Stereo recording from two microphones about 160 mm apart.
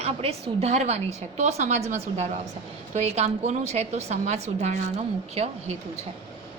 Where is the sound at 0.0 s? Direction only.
40° right (ahead or behind).